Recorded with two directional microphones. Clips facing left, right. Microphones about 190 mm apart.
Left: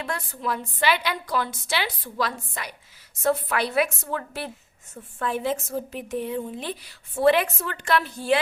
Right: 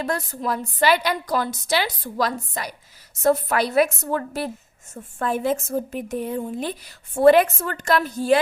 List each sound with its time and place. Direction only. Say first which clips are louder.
0.0 s a woman's voice: right 5 dB; 40° right (ahead or behind)